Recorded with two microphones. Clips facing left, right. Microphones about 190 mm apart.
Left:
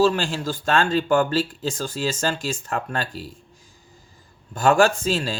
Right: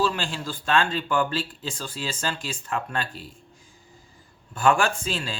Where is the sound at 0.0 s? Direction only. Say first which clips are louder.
Left 6 dB; 45° left (ahead or behind).